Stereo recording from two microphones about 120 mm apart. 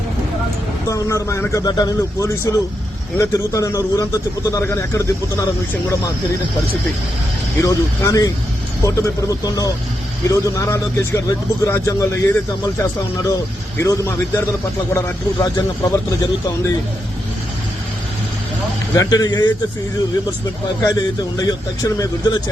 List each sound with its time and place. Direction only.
0.9 s a man's voice: 25° left (ahead or behind)
7.6 s a man's voice: 25° left (ahead or behind)
18.9 s speech: 30° left (ahead or behind)
21.3 s speech: 30° left (ahead or behind)